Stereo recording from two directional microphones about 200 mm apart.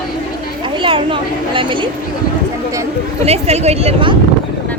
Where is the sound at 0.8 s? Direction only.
25° right (ahead or behind).